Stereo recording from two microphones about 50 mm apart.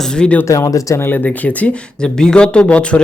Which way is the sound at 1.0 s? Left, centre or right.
Left.